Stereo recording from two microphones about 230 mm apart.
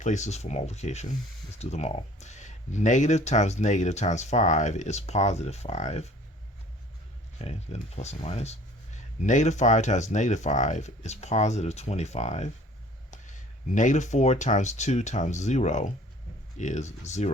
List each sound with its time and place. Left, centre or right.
0.0 s speech: left
7.3 s speech: left